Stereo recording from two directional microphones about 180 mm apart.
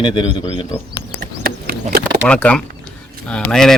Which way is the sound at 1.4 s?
60° right (ahead or behind).